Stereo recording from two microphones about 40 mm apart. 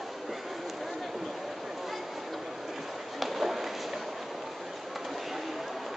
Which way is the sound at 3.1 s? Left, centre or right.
Centre.